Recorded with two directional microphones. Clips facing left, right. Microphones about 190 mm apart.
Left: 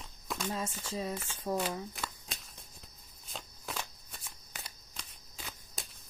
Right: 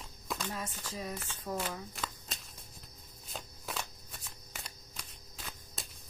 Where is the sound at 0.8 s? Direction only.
25° left (ahead or behind).